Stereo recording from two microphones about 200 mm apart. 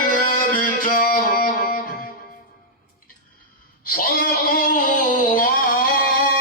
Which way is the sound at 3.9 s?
45° left (ahead or behind).